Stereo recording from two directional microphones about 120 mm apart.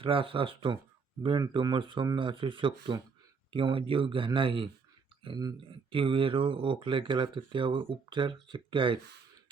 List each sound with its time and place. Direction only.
0.0 s speech: 50° right (ahead or behind)
5.9 s speech: 45° right (ahead or behind)